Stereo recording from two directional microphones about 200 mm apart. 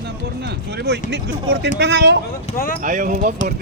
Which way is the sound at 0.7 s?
55° right (ahead or behind).